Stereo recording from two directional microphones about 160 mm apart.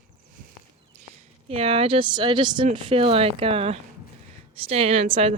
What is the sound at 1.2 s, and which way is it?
A woman's voice, 40° right (ahead or behind).